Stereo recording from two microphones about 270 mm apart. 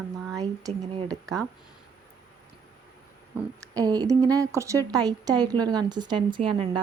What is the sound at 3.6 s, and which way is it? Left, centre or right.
A woman's voice, centre.